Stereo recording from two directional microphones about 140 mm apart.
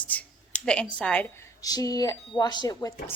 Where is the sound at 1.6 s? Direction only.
25° left (ahead or behind).